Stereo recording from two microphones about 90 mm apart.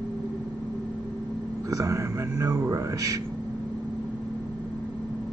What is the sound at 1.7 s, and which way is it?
Speech, 35° right (ahead or behind).